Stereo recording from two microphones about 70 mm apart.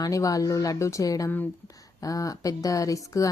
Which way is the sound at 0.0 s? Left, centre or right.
Left.